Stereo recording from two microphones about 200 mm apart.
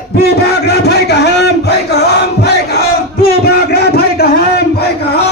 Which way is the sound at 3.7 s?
50° left (ahead or behind).